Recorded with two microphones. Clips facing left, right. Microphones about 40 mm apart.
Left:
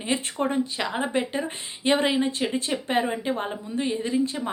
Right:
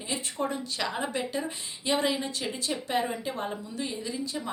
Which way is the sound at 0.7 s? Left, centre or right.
Left.